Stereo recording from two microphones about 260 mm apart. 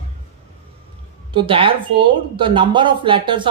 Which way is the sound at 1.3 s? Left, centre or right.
Centre.